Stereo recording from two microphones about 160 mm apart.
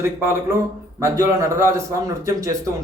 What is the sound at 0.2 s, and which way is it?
A man's voice, 15° right (ahead or behind).